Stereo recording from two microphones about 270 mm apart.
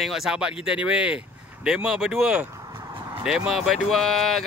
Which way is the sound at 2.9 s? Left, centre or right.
Centre.